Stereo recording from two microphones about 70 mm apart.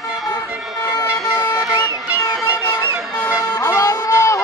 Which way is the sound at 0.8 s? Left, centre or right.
Left.